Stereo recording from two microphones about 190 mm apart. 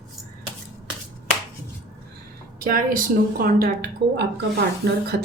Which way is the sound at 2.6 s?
50° right (ahead or behind).